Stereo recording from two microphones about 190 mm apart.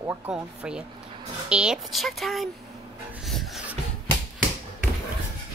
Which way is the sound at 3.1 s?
Centre (ahead or behind).